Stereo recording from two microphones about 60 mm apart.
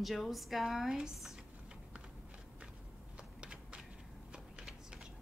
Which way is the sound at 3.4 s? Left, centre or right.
Centre.